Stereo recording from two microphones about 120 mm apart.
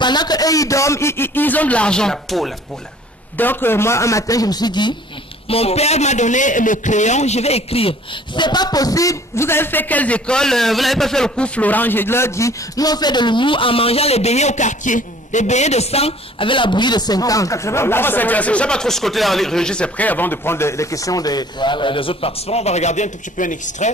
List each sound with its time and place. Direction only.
0.0 s a man's voice: 35° left (ahead or behind); by 2.5 s 5° left (ahead or behind)
3.3 s a man's voice: 15° left (ahead or behind); by 4.9 s 35° left (ahead or behind)
5.5 s a man's voice: 55° left (ahead or behind)
8.4 s a man's voice: 35° left (ahead or behind); by 23.9 s 90° left